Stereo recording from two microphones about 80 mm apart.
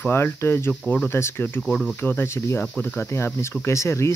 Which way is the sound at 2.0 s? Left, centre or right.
Left.